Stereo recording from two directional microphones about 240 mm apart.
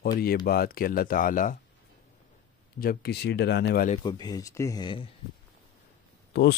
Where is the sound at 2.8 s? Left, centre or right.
Left.